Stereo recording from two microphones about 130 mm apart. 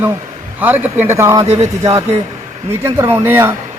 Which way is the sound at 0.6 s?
15° right (ahead or behind).